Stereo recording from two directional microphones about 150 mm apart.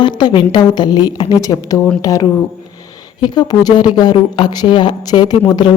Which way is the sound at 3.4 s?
25° left (ahead or behind).